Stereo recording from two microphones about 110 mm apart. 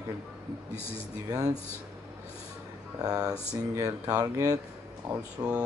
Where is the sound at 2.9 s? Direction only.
35° right (ahead or behind).